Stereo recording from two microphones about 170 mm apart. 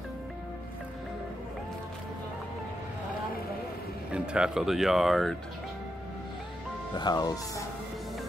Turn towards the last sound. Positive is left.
turn(degrees=20)  # may be behind; listen again after turning